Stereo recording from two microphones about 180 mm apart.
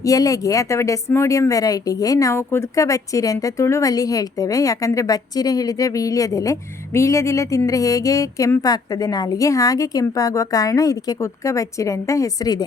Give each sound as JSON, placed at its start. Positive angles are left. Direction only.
{"t": 0.0, "sound": "speech", "side_deg": 20}